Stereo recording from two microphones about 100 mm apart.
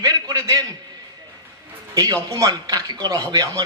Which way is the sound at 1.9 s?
40° right (ahead or behind).